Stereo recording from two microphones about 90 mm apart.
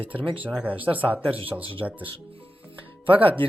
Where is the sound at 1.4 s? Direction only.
75° right (ahead or behind).